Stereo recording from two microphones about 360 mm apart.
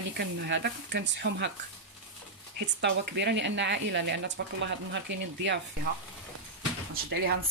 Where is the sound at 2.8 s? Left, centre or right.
Right.